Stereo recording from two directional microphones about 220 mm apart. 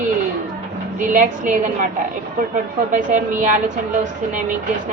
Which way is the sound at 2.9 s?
35° right (ahead or behind).